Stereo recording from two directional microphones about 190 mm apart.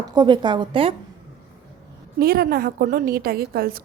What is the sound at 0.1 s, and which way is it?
Speech, 20° right (ahead or behind).